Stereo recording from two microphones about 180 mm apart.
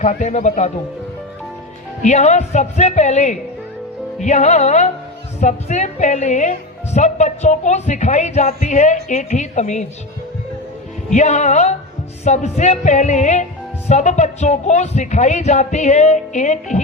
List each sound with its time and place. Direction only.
0.0 s a woman's voice: 45° left (ahead or behind)
2.0 s a woman's voice: 45° left (ahead or behind)
11.1 s a woman's voice: 40° left (ahead or behind)